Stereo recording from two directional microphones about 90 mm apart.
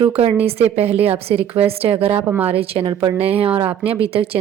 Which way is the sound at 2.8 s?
45° right (ahead or behind).